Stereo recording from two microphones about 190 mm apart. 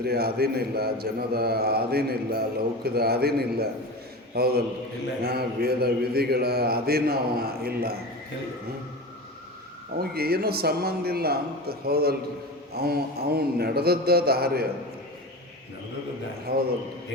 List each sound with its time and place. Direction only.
0.0 s mantra: 55° right (ahead or behind)
10.0 s mantra: 55° right (ahead or behind)
16.5 s mantra: 55° right (ahead or behind)